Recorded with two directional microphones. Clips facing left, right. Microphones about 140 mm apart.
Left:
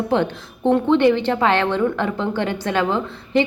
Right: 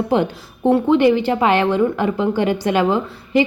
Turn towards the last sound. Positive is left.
turn(degrees=-10)  # may be behind; listen again after turning